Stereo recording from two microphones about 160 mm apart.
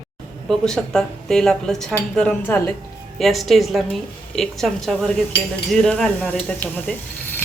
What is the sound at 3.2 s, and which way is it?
Speech, centre (ahead or behind).